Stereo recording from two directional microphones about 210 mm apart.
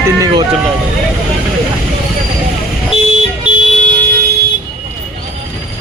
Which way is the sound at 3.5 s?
5° right (ahead or behind).